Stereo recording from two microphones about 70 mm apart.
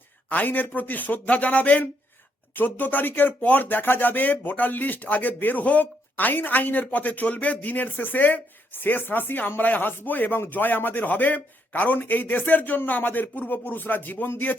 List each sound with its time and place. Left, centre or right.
0.3 s speech: left